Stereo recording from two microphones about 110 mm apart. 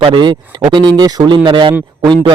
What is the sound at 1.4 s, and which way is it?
Speech, 50° right (ahead or behind).